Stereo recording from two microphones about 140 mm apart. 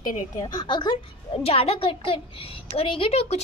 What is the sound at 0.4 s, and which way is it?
A child's voice, 35° left (ahead or behind).